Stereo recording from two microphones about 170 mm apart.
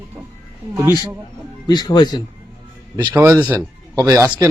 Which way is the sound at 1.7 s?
25° left (ahead or behind).